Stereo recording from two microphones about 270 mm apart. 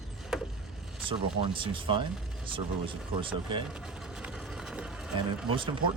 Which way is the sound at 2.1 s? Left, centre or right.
Centre.